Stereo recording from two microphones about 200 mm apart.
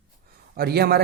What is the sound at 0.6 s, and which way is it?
Speech, 50° right (ahead or behind).